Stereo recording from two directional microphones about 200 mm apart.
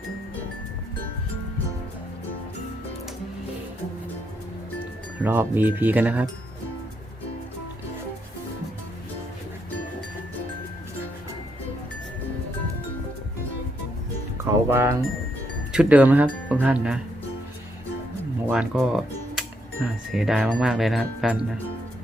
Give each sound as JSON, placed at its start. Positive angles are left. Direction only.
{"t": 5.2, "sound": "speech", "side_deg": -10}
{"t": 14.3, "sound": "music", "side_deg": -15}
{"t": 15.7, "sound": "speech", "side_deg": -5}
{"t": 18.4, "sound": "speech", "side_deg": -5}